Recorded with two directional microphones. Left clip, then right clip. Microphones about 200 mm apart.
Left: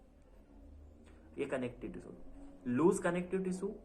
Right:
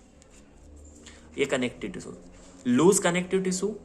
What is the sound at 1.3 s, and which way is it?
Speech, 30° right (ahead or behind).